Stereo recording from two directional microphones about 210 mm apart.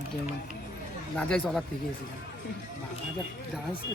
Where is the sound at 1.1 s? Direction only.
Centre (ahead or behind).